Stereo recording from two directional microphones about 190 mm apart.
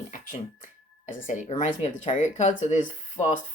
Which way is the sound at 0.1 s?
45° left (ahead or behind).